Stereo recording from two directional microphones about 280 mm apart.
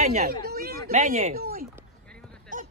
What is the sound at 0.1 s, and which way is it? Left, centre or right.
Chatter, right.